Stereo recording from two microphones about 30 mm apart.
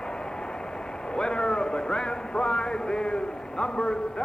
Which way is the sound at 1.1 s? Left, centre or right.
Left.